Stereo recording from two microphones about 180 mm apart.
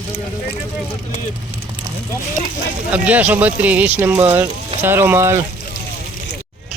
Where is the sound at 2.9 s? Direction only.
10° right (ahead or behind).